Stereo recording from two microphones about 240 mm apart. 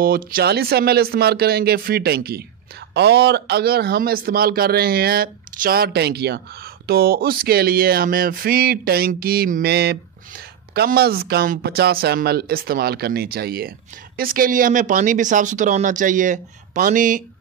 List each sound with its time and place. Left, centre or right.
0.0 s a man's voice: right